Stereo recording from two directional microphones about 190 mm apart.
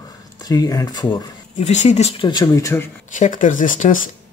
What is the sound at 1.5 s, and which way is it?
Speech, 40° left (ahead or behind).